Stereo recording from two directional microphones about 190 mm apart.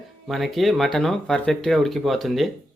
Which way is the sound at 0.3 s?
Centre (ahead or behind).